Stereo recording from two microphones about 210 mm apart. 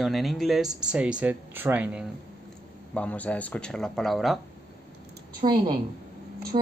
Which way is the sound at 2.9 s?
5° left (ahead or behind).